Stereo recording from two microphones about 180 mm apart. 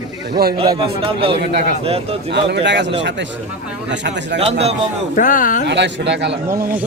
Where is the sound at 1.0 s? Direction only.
30° right (ahead or behind).